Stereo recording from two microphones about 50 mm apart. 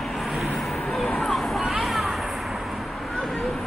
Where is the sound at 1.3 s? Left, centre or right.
Centre.